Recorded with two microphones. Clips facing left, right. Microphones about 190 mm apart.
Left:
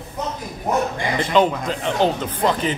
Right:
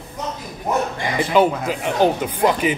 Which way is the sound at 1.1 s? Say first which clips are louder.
Right 2 dB; 10° right (ahead or behind).